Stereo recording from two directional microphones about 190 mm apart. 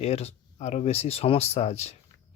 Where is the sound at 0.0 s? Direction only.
35° left (ahead or behind).